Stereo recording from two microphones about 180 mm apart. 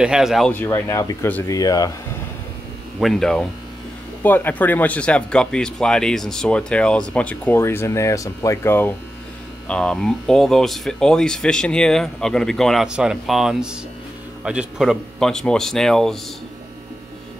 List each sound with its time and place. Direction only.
0.0 s speech: 5° right (ahead or behind)
0.5 s speech: 15° left (ahead or behind)
3.0 s speech: centre (ahead or behind)